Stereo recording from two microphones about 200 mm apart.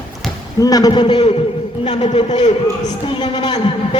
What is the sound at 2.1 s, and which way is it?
A man's voice, 35° left (ahead or behind).